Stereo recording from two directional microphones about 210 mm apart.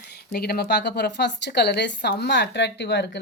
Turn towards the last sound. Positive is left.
turn(degrees=55)  # may be behind; listen again after turning